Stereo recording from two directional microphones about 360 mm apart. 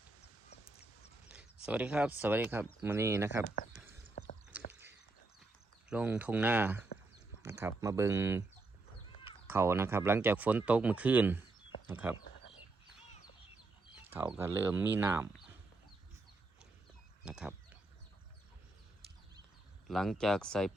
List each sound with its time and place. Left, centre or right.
1.3 s speech: centre
3.4 s speech: left
4.5 s a sound: centre
5.9 s speech: centre
9.5 s speech: centre
14.1 s speech: centre
17.2 s a sound: centre
19.9 s speech: centre